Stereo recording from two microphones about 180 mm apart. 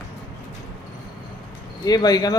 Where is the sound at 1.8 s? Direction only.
20° left (ahead or behind).